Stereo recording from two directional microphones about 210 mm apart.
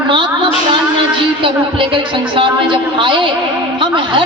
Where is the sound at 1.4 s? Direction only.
25° right (ahead or behind).